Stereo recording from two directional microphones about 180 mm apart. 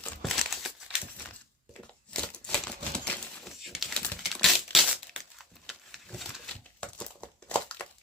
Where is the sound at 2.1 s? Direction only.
5° left (ahead or behind).